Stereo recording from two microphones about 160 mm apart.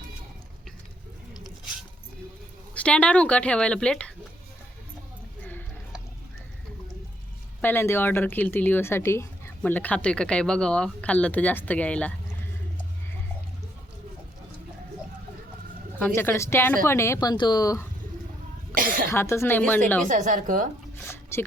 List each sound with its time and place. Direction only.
2.7 s speech: 5° left (ahead or behind)
7.6 s speech: 15° left (ahead or behind)
16.0 s speech: 10° left (ahead or behind)
18.7 s cough: 60° right (ahead or behind)
19.1 s speech: 15° left (ahead or behind)
20.1 s a woman's voice: 55° right (ahead or behind)
21.0 s a sound: 15° left (ahead or behind)